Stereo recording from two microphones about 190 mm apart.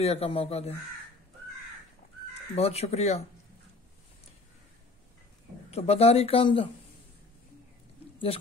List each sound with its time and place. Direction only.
0.0 s speech: 30° left (ahead or behind)
2.5 s speech: 35° left (ahead or behind)
5.7 s speech: 35° left (ahead or behind)